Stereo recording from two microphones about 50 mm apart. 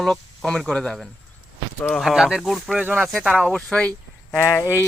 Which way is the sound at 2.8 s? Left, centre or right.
Right.